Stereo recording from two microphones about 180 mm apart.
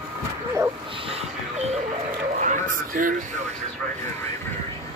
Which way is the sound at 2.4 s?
45° right (ahead or behind).